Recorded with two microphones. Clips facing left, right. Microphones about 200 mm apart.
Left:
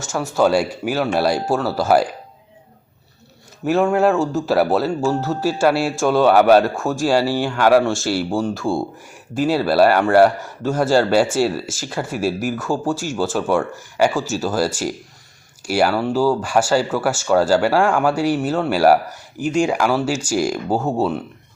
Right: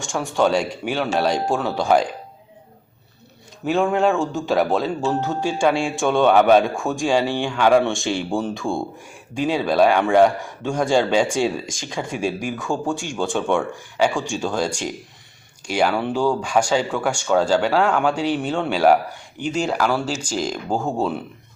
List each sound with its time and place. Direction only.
0.0 s speech: 5° left (ahead or behind)
3.6 s speech: centre (ahead or behind)